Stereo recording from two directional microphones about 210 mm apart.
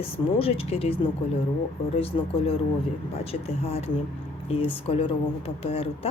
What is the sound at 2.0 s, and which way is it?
Speech, 25° left (ahead or behind).